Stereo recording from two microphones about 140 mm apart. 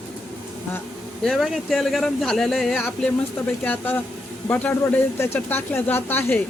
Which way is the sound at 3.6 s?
15° left (ahead or behind).